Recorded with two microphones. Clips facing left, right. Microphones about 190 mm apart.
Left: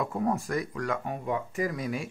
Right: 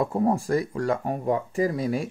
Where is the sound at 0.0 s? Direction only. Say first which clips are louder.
Right 5 dB; 30° right (ahead or behind).